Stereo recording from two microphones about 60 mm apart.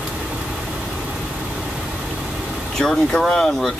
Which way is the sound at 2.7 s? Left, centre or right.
Centre.